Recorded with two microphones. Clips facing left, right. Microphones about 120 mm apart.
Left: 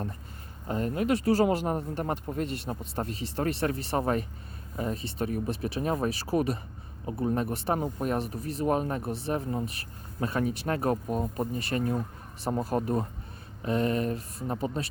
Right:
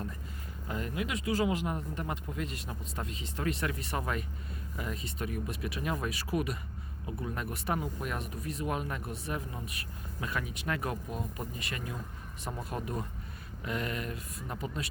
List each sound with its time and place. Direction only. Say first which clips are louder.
0.7 s speech: left 8 dB; 40° left (ahead or behind)